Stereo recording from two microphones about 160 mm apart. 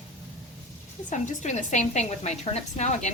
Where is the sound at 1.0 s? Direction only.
50° left (ahead or behind).